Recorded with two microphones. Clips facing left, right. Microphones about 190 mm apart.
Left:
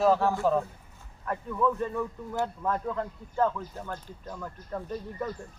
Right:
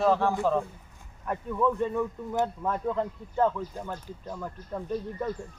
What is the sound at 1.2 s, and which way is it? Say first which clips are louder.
Speech: right 1 dB; 15° right (ahead or behind).